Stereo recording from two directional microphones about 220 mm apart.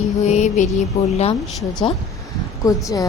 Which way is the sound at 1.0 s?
30° left (ahead or behind).